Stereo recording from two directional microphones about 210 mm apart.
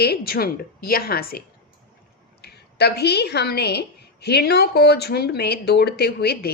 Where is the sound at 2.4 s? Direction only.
50° left (ahead or behind).